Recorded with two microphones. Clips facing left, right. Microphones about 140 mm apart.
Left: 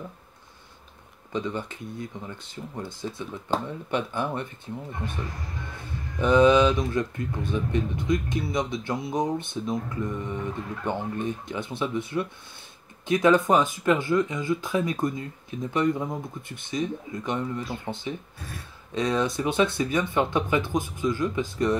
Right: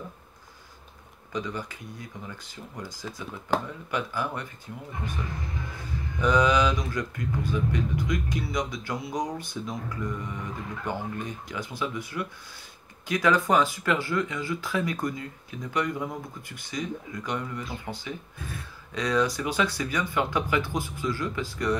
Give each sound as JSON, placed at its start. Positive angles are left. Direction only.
{"t": 1.3, "sound": "speech", "side_deg": 25}
{"t": 6.1, "sound": "speech", "side_deg": 25}